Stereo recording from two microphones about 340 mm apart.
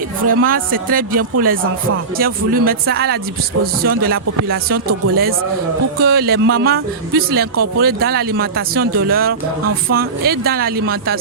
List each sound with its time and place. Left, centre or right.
0.3 s speech: right